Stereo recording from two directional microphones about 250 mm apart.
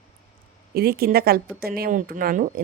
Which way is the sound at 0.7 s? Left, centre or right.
Right.